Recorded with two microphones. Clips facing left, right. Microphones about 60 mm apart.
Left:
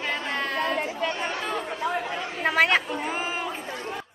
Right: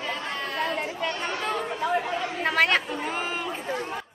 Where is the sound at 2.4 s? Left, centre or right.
Centre.